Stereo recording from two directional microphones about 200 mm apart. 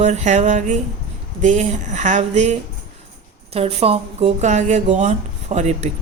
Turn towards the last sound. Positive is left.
turn(degrees=-35)  # may be behind; listen again after turning